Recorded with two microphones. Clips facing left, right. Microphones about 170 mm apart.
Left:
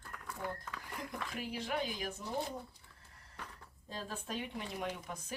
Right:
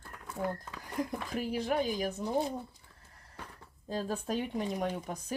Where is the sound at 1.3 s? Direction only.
40° right (ahead or behind).